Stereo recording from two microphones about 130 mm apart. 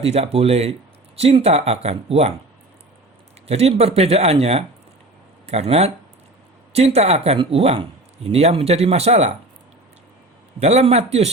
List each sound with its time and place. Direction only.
0.0 s speech: 50° right (ahead or behind)
3.4 s speech: 50° right (ahead or behind)
10.6 s a man's voice: 60° right (ahead or behind)